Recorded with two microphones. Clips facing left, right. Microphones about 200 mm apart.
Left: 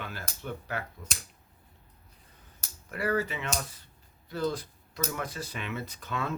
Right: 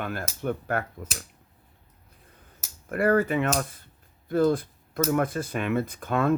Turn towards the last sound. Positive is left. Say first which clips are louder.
# right 9 dB
turn(degrees=-50)  # may be behind; listen again after turning